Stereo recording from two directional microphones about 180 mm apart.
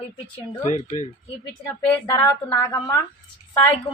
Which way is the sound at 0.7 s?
45° left (ahead or behind).